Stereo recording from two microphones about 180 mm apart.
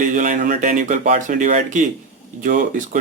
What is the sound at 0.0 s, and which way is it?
Speech, 45° right (ahead or behind).